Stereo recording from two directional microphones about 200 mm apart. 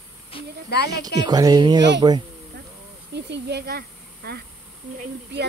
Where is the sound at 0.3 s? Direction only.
25° left (ahead or behind).